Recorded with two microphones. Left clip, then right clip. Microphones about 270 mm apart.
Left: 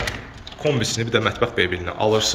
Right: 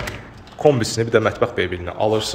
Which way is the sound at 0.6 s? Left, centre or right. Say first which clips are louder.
Right 6 dB; centre.